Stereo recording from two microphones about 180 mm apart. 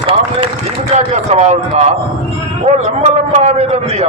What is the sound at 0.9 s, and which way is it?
A man's voice, 40° right (ahead or behind).